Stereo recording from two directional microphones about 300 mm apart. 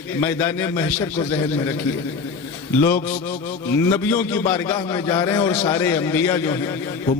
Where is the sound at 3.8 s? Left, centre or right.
Centre.